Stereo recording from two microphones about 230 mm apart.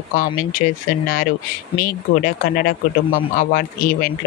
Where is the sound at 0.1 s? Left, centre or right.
Left.